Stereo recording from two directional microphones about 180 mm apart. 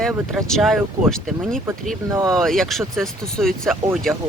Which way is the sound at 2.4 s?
Centre (ahead or behind).